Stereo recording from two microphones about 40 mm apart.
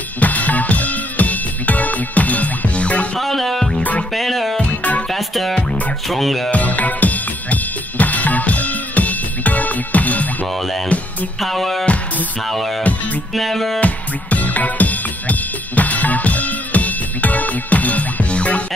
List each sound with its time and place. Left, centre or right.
0.2 s music: left
3.2 s music: centre
5.5 s music: left
6.0 s music: centre
6.5 s drum kit: left
10.9 s music: left
11.4 s music: centre
13.7 s drum kit: left